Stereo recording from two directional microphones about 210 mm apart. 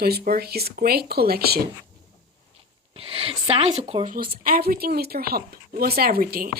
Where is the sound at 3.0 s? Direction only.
25° right (ahead or behind).